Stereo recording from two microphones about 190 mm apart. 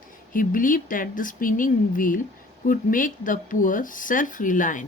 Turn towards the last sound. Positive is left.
turn(degrees=45)  # may be behind; listen again after turning